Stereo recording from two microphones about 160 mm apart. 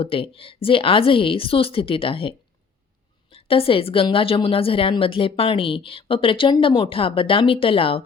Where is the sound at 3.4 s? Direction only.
35° left (ahead or behind).